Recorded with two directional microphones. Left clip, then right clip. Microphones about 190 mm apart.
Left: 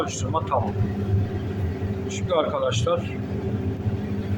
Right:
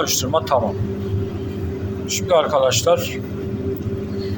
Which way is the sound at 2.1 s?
15° right (ahead or behind).